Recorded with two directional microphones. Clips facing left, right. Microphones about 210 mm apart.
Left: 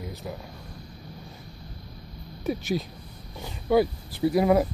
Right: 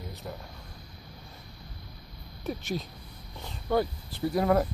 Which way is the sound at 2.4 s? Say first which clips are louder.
Left 6 dB; 5° left (ahead or behind).